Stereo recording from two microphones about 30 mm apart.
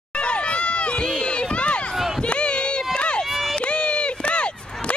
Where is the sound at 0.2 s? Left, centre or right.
Left.